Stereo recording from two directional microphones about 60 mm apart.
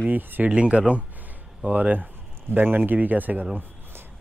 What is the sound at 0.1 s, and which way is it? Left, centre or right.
Speech, right.